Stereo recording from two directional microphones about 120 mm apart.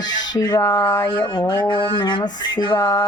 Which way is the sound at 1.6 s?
40° left (ahead or behind).